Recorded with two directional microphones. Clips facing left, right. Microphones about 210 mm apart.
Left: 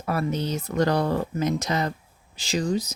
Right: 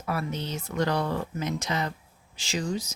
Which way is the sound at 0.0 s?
40° left (ahead or behind).